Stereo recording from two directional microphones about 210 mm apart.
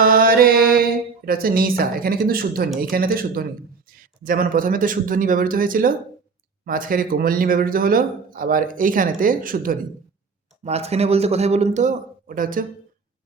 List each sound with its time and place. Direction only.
0.0 s a sound: 40° right (ahead or behind)
2.8 s speech: 45° right (ahead or behind)
10.6 s speech: 30° right (ahead or behind)